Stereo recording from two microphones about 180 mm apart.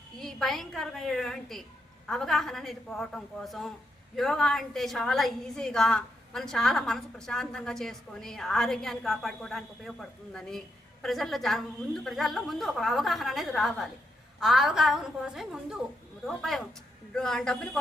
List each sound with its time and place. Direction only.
0.2 s a woman's voice: centre (ahead or behind)